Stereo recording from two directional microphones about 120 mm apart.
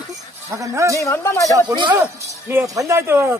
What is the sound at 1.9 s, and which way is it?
Speech, 20° right (ahead or behind).